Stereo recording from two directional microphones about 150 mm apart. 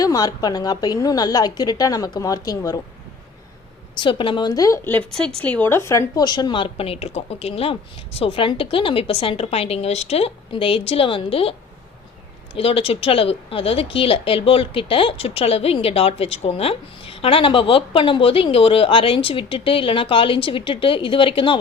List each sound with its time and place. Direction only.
0.0 s a woman's voice: 25° left (ahead or behind)
3.9 s a woman's voice: 35° left (ahead or behind)
12.5 s a woman's voice: 40° left (ahead or behind)